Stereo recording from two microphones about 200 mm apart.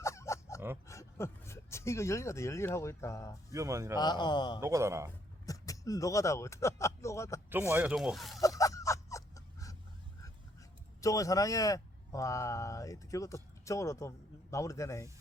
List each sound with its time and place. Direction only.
0.0 s a sound: 15° left (ahead or behind)
0.9 s speech: 15° left (ahead or behind)
3.5 s a man's voice: 15° right (ahead or behind)
3.9 s a man's voice: 20° left (ahead or behind)
4.6 s a man's voice: 15° right (ahead or behind)
5.5 s speech: 15° left (ahead or behind)
7.7 s speech: 5° right (ahead or behind)
8.4 s a sound: 15° left (ahead or behind)
11.0 s speech: 15° left (ahead or behind)